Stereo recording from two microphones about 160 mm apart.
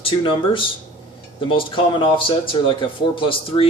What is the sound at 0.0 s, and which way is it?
A man's voice, 30° left (ahead or behind).